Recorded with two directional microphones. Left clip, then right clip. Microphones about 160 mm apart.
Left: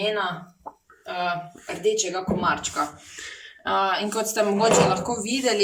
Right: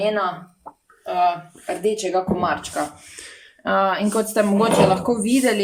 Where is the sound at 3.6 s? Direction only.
45° right (ahead or behind).